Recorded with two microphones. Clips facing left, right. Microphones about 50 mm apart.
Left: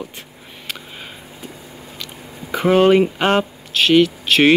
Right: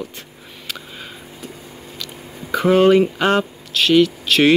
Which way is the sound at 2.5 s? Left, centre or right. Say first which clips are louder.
Even; centre.